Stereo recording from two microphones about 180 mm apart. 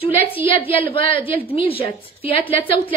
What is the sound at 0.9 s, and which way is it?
Speech, 30° left (ahead or behind).